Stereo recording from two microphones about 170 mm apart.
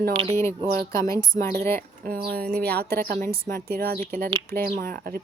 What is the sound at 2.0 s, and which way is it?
A woman's voice, 65° right (ahead or behind).